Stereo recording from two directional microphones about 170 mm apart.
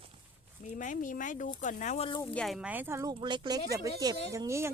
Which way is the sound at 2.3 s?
Centre (ahead or behind).